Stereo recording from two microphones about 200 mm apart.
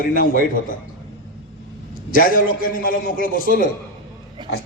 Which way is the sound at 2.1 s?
45° left (ahead or behind).